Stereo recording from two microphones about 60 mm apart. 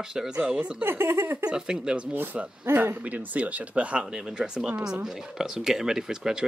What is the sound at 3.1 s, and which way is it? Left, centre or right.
Speech, right.